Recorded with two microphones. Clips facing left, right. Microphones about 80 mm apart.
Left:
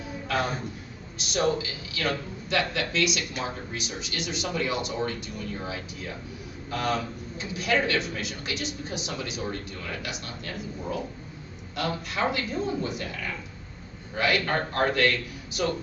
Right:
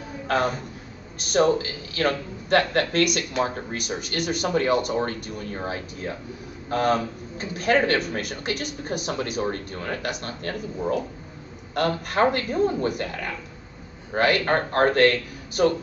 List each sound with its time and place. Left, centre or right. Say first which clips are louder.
1.2 s a man's voice: right 6 dB; right